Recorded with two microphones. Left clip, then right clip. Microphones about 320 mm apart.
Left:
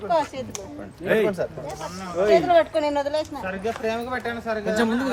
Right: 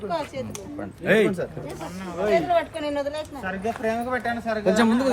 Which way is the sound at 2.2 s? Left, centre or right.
Left.